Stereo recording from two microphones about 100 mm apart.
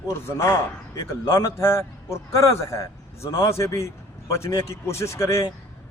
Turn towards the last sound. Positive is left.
turn(degrees=30)  # may be behind; listen again after turning